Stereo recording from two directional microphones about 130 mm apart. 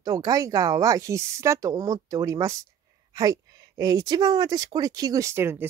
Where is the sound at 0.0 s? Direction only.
30° right (ahead or behind).